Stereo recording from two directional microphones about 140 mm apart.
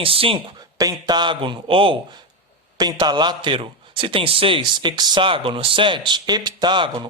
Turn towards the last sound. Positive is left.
turn(degrees=-35)  # may be behind; listen again after turning